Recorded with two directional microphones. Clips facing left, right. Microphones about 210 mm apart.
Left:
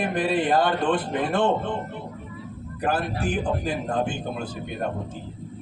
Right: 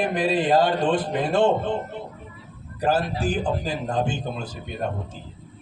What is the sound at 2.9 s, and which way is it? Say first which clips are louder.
Speech: right 3 dB; 55° left (ahead or behind).